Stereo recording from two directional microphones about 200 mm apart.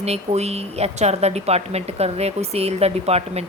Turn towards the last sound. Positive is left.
turn(degrees=-30)  # may be behind; listen again after turning